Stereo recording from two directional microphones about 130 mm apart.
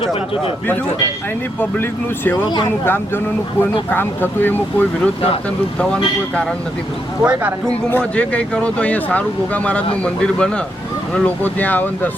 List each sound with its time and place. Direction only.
0.0 s speech: 45° left (ahead or behind)
3.6 s speech: 15° left (ahead or behind)
7.2 s speech: 10° right (ahead or behind)
7.9 s speech: 10° left (ahead or behind)